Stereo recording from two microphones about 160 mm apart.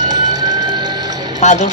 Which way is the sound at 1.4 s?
45° left (ahead or behind).